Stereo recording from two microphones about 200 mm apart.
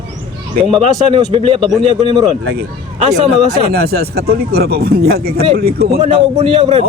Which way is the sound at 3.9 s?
50° right (ahead or behind).